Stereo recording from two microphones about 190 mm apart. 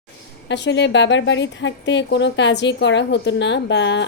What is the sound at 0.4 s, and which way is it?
A woman's voice, 65° left (ahead or behind).